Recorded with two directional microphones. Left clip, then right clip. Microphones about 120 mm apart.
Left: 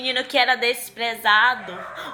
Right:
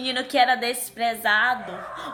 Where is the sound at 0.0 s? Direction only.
40° right (ahead or behind).